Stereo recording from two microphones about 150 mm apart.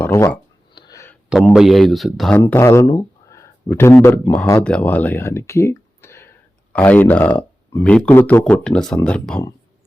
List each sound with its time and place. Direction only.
0.0 s speech: 15° left (ahead or behind)
0.7 s a sound: 30° left (ahead or behind)
1.3 s a man's voice: centre (ahead or behind)
2.3 s speech: 15° left (ahead or behind)